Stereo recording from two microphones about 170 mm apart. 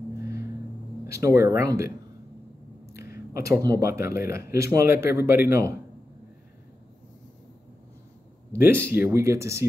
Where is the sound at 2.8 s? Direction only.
15° right (ahead or behind).